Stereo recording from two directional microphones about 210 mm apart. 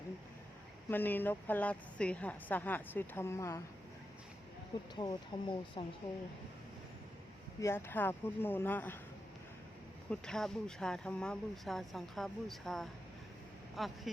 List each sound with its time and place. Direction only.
0.9 s a woman's voice: 10° left (ahead or behind)
4.9 s a woman's voice: 20° left (ahead or behind)
7.6 s a woman's voice: 10° left (ahead or behind)
10.1 s speech: 5° left (ahead or behind)